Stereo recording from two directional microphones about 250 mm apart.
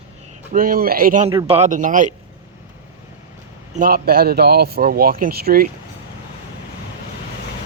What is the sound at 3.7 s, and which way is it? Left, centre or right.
Speech, right.